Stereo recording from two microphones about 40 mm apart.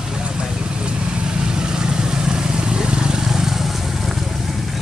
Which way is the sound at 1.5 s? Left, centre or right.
Centre.